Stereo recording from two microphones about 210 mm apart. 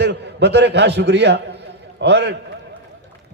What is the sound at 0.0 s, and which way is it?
A man's voice, 55° right (ahead or behind).